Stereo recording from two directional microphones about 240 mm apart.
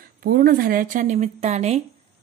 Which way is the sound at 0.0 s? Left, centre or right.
Right.